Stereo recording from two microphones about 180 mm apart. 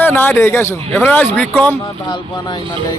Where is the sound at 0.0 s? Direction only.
10° left (ahead or behind).